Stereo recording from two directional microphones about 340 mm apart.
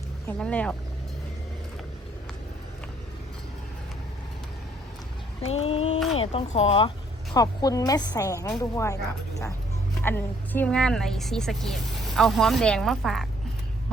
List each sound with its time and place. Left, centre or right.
0.3 s speech: centre
5.4 s a sound: centre
6.1 s a woman's voice: centre